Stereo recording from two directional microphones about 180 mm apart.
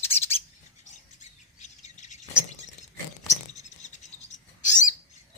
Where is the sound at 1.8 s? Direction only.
40° left (ahead or behind).